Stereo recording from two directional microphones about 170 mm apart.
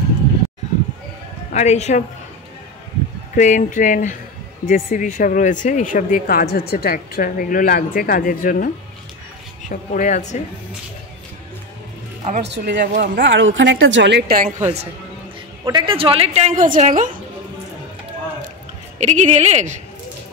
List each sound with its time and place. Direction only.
1.5 s speech: 40° left (ahead or behind)
3.3 s speech: 45° left (ahead or behind)
9.7 s speech: 45° left (ahead or behind)
12.4 s a woman's voice: 90° right; by 14.5 s 60° right (ahead or behind)
14.6 s a woman's voice: 40° right (ahead or behind)
15.6 s a woman's voice: 30° right (ahead or behind); by 17.1 s 50° right (ahead or behind)
18.9 s speech: 45° right (ahead or behind)